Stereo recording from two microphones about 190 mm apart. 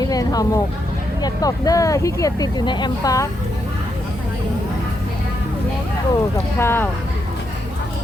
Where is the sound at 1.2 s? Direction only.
20° left (ahead or behind).